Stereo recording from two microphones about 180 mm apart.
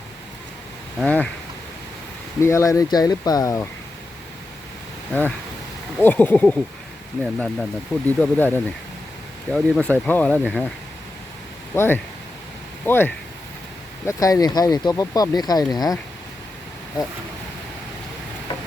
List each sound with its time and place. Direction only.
0.9 s speech: 5° left (ahead or behind)
2.4 s speech: 15° left (ahead or behind)
6.0 s speech: 10° left (ahead or behind)
11.7 s speech: 10° left (ahead or behind)